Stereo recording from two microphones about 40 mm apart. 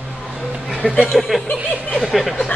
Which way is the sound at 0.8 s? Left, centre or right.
Left.